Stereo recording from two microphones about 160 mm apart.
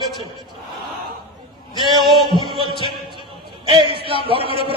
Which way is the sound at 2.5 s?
30° right (ahead or behind).